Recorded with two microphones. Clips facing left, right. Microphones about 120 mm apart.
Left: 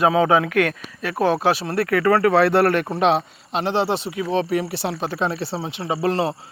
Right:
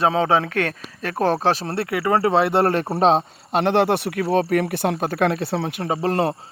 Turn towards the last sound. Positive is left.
turn(degrees=-45)  # may be behind; listen again after turning